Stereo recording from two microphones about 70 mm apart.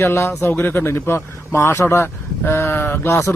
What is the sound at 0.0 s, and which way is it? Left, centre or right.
Speech, left.